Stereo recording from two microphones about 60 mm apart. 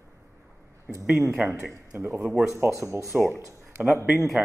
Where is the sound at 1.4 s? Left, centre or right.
Right.